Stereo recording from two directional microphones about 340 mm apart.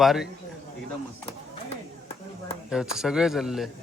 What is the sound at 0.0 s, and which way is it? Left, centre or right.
Speech, centre.